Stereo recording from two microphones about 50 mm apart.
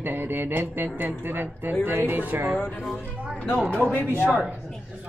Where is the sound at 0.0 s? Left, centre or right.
Right.